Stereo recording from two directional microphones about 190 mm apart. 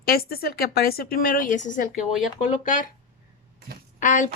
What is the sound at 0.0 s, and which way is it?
A woman's voice, 55° left (ahead or behind).